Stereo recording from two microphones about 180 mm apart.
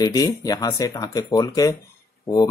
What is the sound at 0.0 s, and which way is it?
A man's voice, 20° left (ahead or behind).